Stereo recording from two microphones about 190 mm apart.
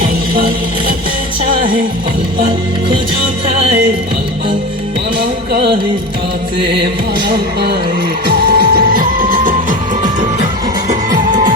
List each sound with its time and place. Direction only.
0.0 s music: 50° right (ahead or behind)
5.5 s music: 60° right (ahead or behind)
7.3 s music: 55° right (ahead or behind)
10.8 s music: 45° right (ahead or behind)